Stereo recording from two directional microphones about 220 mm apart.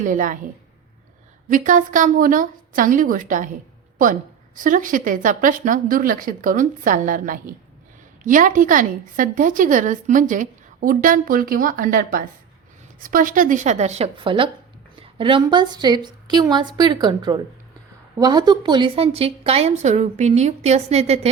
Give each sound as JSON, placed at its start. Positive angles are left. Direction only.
{"t": 0.0, "sound": "a woman's voice", "side_deg": -35}
{"t": 1.5, "sound": "a woman's voice", "side_deg": -35}